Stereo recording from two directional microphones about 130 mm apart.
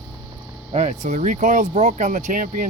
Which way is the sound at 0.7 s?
65° right (ahead or behind).